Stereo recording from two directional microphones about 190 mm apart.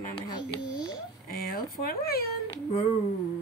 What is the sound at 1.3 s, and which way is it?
Speech, 50° left (ahead or behind).